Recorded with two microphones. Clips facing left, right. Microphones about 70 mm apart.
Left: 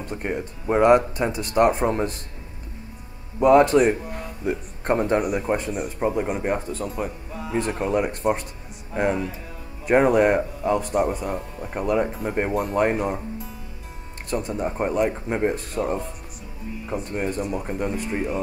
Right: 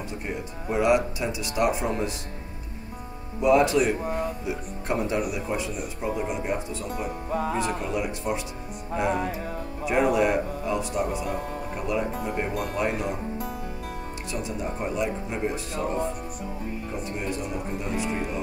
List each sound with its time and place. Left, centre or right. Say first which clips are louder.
0.1 s speech: left 5 dB; left
3.3 s speech: left 5 dB; left
4.0 s speech: right 6 dB; right
4.5 s speech: left 5 dB; left
7.2 s music: right 7 dB; right
7.5 s speech: left 4 dB; left
9.8 s speech: left 5 dB; left
14.3 s speech: left 6 dB; left